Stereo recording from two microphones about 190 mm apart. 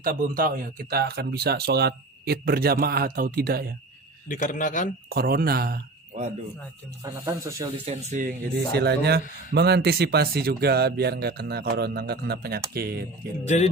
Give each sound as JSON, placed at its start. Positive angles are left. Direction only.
{"t": 0.0, "sound": "speech", "side_deg": -50}
{"t": 4.3, "sound": "a man's voice", "side_deg": 45}
{"t": 5.0, "sound": "speech", "side_deg": -55}
{"t": 7.0, "sound": "speech", "side_deg": -20}
{"t": 7.9, "sound": "a man's voice", "side_deg": -40}
{"t": 13.4, "sound": "speech", "side_deg": 35}